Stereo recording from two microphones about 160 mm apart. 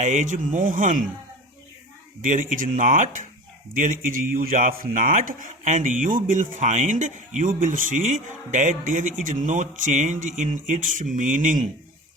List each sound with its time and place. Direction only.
0.0 s speech: 50° right (ahead or behind)
2.2 s a man's voice: 55° right (ahead or behind)